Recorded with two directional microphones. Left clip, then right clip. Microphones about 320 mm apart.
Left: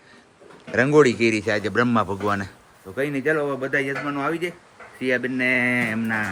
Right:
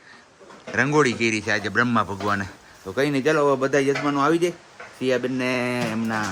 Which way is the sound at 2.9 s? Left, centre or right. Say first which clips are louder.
Right 2 dB; centre.